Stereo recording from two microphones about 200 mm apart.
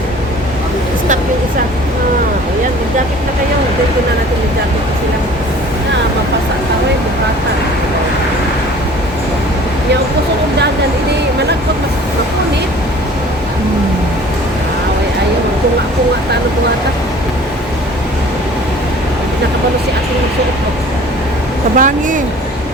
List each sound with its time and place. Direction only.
21.8 s a woman's voice: 40° right (ahead or behind)